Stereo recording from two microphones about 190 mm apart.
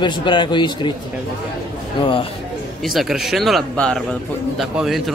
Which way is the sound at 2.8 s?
Centre (ahead or behind).